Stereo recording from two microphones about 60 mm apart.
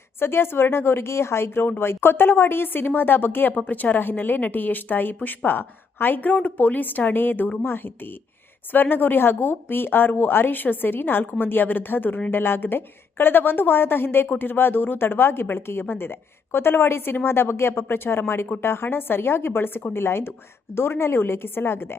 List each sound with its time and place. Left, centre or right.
0.2 s a woman's voice: left